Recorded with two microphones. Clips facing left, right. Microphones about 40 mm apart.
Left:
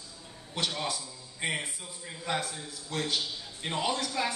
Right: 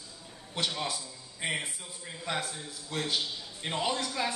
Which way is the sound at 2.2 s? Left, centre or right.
Centre.